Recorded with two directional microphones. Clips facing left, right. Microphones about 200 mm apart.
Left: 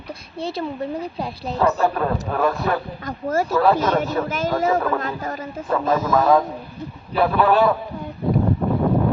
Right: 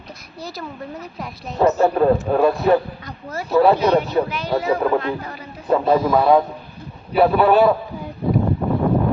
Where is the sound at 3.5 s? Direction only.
20° right (ahead or behind).